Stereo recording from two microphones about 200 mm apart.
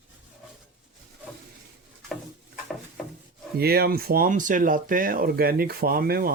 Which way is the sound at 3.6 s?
50° right (ahead or behind).